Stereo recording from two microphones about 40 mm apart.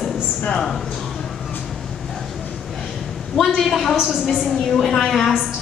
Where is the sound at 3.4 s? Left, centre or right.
Centre.